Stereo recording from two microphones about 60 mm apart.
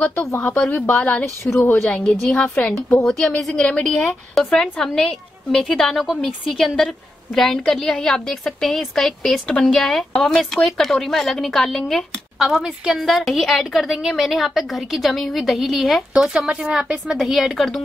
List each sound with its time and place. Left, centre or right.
0.5 s speech: left
3.0 s a woman's voice: centre
12.4 s a woman's voice: centre
16.1 s a woman's voice: centre